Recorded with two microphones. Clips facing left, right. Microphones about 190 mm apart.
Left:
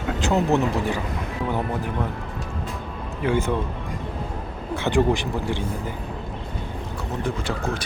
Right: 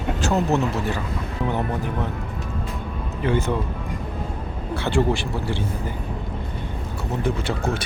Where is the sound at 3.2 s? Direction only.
15° left (ahead or behind).